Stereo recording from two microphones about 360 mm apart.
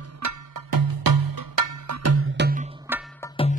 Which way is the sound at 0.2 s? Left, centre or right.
Right.